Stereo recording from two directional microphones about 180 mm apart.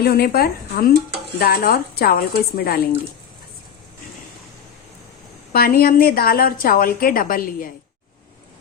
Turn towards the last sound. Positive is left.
turn(degrees=50)  # may be behind; listen again after turning